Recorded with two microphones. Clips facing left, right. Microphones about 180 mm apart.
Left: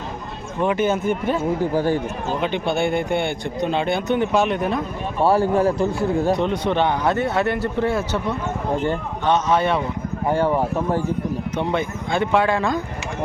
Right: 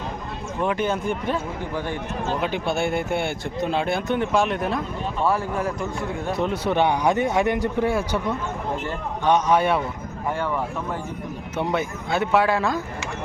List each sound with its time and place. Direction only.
0.6 s speech: 5° left (ahead or behind)
1.7 s speech: 35° left (ahead or behind)
2.4 s speech: centre (ahead or behind)
5.2 s speech: 30° left (ahead or behind)
6.3 s a man's voice: 5° right (ahead or behind)
10.2 s speech: 35° left (ahead or behind)
11.5 s speech: 5° right (ahead or behind)